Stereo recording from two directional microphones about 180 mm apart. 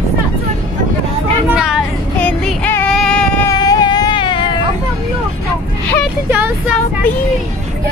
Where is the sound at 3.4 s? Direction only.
20° left (ahead or behind).